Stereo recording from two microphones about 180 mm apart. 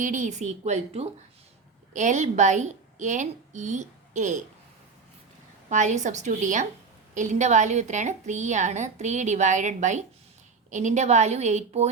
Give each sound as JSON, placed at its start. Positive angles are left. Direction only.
{"t": 0.0, "sound": "a woman's voice", "side_deg": -45}
{"t": 5.6, "sound": "a woman's voice", "side_deg": -40}